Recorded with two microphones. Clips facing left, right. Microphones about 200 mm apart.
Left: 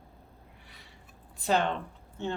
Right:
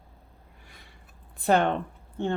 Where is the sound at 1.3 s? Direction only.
55° right (ahead or behind).